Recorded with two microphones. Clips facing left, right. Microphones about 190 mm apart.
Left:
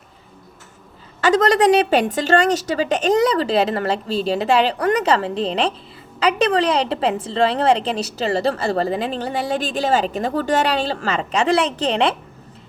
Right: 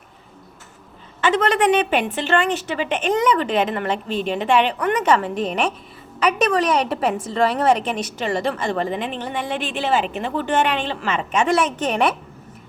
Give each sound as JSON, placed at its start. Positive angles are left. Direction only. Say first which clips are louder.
{"t": 1.2, "sound": "a woman's voice", "louder": "left 3 dB", "side_deg": 40}